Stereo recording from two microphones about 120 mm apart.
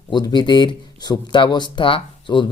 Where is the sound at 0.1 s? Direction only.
40° left (ahead or behind).